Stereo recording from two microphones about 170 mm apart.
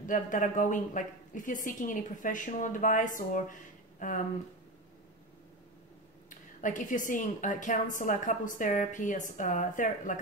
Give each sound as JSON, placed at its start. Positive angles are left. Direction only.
{"t": 0.0, "sound": "a woman's voice", "side_deg": 50}
{"t": 6.6, "sound": "a woman's voice", "side_deg": 50}